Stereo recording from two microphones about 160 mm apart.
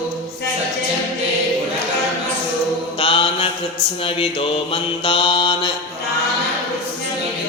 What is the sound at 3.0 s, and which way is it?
Mantra, 35° left (ahead or behind).